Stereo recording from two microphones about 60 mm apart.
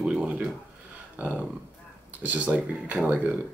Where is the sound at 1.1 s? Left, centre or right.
Right.